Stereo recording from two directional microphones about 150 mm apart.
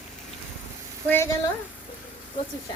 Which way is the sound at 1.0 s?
15° left (ahead or behind).